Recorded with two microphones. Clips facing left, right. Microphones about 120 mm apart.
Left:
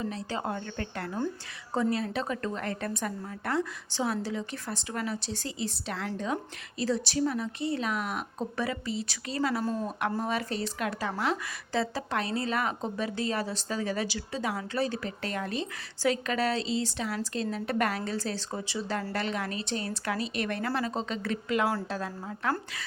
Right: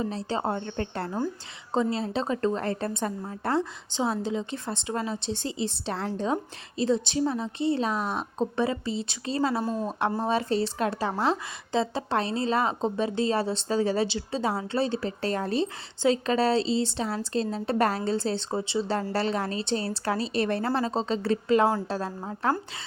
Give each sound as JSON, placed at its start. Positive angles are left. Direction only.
{"t": 0.0, "sound": "a woman's voice", "side_deg": -30}